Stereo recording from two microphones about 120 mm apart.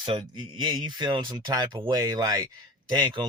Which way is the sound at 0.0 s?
45° right (ahead or behind).